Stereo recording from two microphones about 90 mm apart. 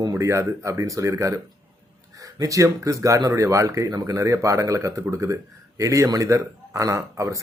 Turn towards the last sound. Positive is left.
turn(degrees=-35)  # may be behind; listen again after turning